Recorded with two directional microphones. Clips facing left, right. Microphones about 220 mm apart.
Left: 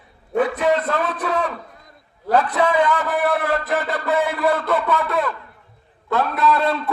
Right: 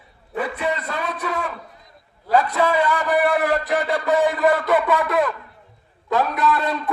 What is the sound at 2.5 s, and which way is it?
A man's voice, 10° right (ahead or behind).